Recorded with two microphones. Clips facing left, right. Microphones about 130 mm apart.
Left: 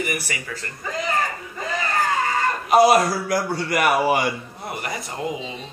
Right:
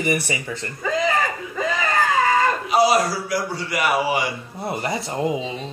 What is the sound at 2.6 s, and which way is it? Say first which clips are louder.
A man's voice: left 7 dB; 55° left (ahead or behind).